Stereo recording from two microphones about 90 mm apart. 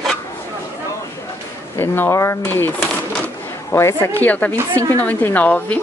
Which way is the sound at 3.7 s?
30° left (ahead or behind).